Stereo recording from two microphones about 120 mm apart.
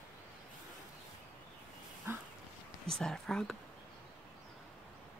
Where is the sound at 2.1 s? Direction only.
20° right (ahead or behind).